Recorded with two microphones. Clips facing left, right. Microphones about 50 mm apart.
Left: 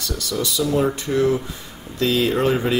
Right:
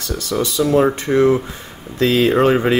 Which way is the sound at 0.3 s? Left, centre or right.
Right.